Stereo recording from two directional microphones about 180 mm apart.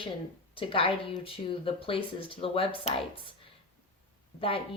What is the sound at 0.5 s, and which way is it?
Speech, 30° left (ahead or behind).